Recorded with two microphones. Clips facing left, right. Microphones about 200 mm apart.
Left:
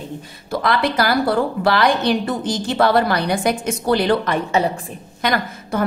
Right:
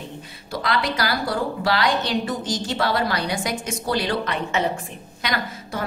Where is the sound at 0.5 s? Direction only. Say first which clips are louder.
Left 5 dB; 50° left (ahead or behind).